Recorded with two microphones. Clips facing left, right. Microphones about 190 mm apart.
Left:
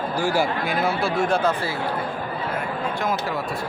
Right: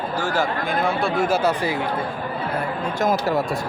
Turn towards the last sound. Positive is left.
turn(degrees=-40)  # may be behind; listen again after turning